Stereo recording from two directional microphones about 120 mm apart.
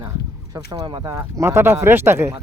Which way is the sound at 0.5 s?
35° right (ahead or behind).